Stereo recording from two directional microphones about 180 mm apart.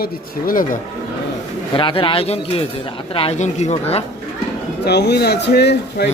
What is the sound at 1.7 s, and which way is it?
Speech, 30° left (ahead or behind).